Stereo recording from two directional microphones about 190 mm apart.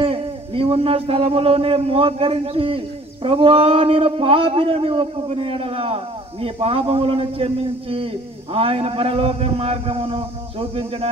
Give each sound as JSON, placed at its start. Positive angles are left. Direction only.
{"t": 0.0, "sound": "a man's voice", "side_deg": -30}